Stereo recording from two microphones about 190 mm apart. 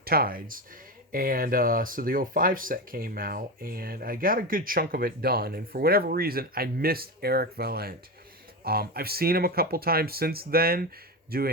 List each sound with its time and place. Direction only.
0.0 s speech: 50° right (ahead or behind)